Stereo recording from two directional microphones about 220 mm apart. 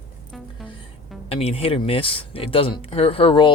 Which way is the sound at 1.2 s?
25° left (ahead or behind).